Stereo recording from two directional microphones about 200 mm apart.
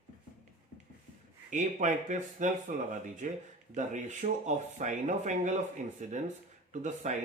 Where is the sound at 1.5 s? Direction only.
40° right (ahead or behind).